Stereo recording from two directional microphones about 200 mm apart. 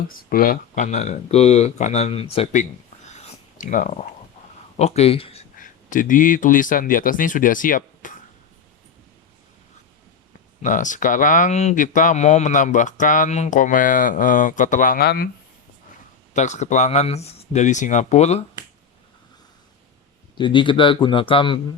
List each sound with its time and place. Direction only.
0.2 s speech: 45° left (ahead or behind)
3.2 s a sound: 40° left (ahead or behind)
4.8 s speech: 30° left (ahead or behind)
5.9 s speech: 40° left (ahead or behind)
10.6 s speech: 40° left (ahead or behind)
16.3 s speech: 35° left (ahead or behind)
20.4 s speech: 25° left (ahead or behind)